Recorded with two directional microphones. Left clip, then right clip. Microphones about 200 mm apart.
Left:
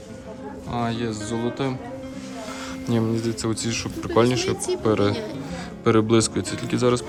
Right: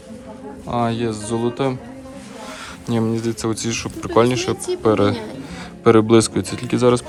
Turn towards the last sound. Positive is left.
turn(degrees=5)  # may be behind; listen again after turning